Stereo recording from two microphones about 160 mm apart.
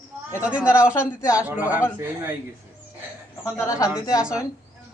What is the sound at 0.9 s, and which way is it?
Speech, 20° left (ahead or behind).